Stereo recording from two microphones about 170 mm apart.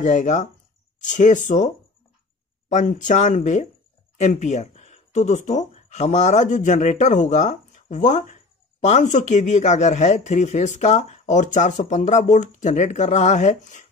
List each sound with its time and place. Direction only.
0.0 s speech: 45° left (ahead or behind)
2.7 s speech: 50° left (ahead or behind)